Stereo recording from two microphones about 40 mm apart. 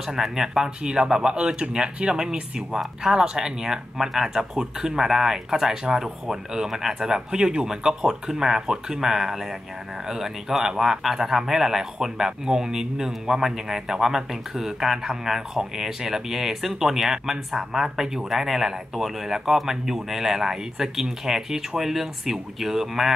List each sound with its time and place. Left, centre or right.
0.2 s speech: centre
0.8 s speech: right